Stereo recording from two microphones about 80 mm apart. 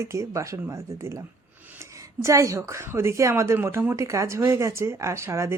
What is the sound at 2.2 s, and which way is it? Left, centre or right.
Speech, right.